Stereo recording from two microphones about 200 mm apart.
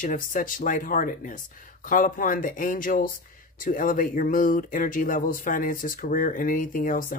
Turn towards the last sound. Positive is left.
turn(degrees=40)  # may be behind; listen again after turning